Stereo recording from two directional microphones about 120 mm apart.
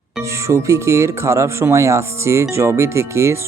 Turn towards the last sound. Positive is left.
turn(degrees=-20)  # may be behind; listen again after turning